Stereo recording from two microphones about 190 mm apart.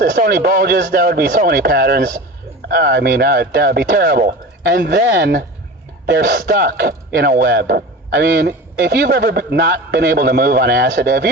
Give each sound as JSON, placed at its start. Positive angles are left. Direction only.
{"t": 0.0, "sound": "a man's voice", "side_deg": -50}